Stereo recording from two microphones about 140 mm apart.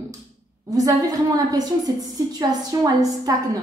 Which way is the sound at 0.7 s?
25° right (ahead or behind).